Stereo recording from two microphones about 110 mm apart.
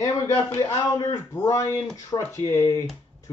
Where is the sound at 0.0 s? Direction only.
25° left (ahead or behind).